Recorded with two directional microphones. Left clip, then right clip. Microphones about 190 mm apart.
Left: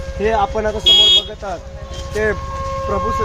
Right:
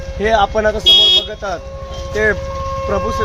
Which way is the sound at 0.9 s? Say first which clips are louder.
Even; 30° right (ahead or behind).